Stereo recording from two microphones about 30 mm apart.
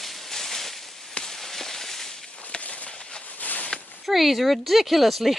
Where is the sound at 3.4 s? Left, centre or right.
Left.